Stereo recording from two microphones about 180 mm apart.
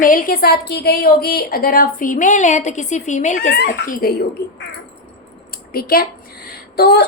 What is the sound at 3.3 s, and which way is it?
Speech, 60° left (ahead or behind).